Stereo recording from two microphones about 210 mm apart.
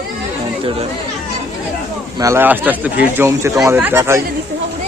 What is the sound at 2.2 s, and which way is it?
Speech, 10° right (ahead or behind).